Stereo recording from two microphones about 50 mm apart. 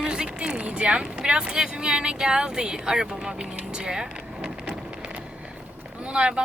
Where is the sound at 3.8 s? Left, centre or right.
Centre.